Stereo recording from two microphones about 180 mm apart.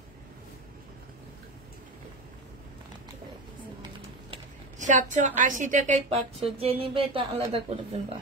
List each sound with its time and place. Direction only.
4.7 s a woman's voice: 45° right (ahead or behind)